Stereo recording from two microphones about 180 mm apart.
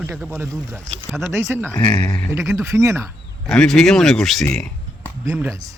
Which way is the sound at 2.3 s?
15° right (ahead or behind).